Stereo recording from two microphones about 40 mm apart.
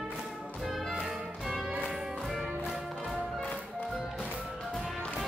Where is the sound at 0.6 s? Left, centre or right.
Centre.